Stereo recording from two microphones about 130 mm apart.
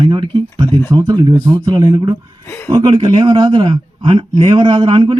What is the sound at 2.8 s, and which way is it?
A man's voice, 40° right (ahead or behind).